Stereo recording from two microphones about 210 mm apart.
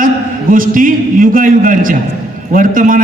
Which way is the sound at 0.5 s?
40° right (ahead or behind).